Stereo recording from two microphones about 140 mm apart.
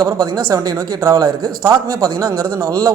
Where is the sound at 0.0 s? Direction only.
25° right (ahead or behind).